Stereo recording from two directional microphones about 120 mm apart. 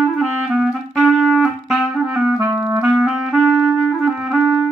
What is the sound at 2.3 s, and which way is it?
Clarinet, 25° right (ahead or behind).